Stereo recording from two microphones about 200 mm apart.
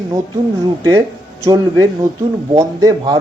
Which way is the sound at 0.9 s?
15° right (ahead or behind).